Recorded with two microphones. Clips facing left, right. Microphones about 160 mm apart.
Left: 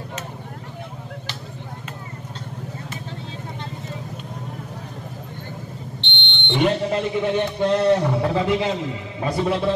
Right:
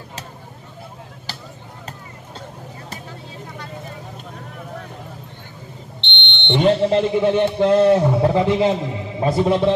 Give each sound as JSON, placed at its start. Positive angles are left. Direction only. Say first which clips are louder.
{"t": 5.9, "sound": "a man's voice", "louder": "right 1 dB", "side_deg": -20}